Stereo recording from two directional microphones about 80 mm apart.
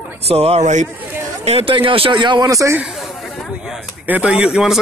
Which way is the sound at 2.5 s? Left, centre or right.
Right.